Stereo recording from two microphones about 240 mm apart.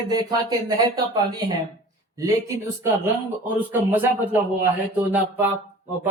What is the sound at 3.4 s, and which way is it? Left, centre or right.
Speech, centre.